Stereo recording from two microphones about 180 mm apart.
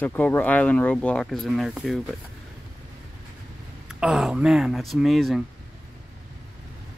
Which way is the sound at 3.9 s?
5° right (ahead or behind).